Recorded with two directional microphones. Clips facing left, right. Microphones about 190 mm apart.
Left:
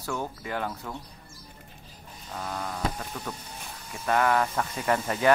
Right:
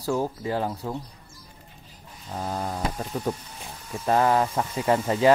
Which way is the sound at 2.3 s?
30° right (ahead or behind).